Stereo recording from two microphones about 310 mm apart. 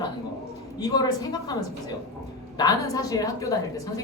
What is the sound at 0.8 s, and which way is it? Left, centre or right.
Speech, centre.